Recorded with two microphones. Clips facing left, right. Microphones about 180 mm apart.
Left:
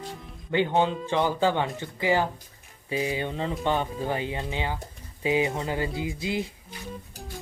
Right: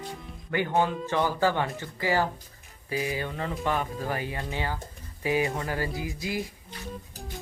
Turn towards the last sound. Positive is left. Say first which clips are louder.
# left 3 dB
turn(degrees=25)  # may be behind; listen again after turning